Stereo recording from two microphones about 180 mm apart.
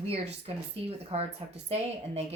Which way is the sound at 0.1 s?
35° right (ahead or behind).